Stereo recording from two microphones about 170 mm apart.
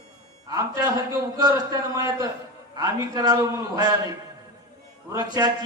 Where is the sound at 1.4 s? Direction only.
20° right (ahead or behind).